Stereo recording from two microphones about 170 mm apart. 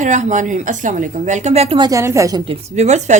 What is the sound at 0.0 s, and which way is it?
A woman's voice, 45° right (ahead or behind).